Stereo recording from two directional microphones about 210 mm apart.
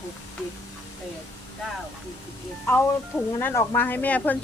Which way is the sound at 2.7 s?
10° left (ahead or behind).